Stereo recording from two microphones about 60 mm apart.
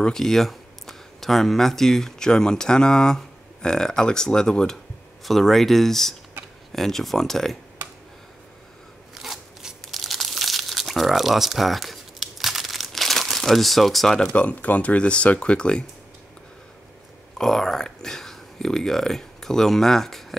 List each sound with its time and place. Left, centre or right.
0.0 s speech: centre
9.1 s scissors: centre
9.9 s crumpling: centre
14.1 s speech: centre
14.4 s speech: left
17.4 s speech: centre